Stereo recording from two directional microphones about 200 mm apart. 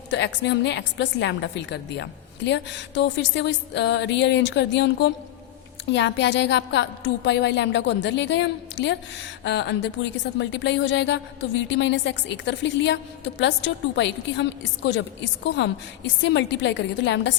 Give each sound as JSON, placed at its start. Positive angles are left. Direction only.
{"t": 0.1, "sound": "a woman's voice", "side_deg": 60}